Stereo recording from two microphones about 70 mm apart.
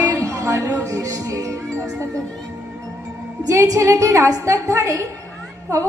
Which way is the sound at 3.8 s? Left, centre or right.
Right.